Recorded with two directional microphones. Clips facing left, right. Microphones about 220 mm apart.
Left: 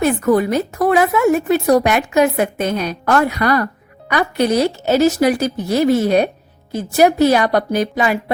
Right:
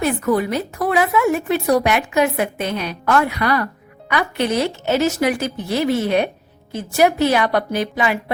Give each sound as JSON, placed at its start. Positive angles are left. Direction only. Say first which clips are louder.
{"t": 0.0, "sound": "a woman's voice", "louder": "left 4 dB", "side_deg": 45}